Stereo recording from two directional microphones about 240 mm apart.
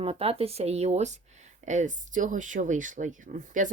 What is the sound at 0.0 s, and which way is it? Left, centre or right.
Speech, right.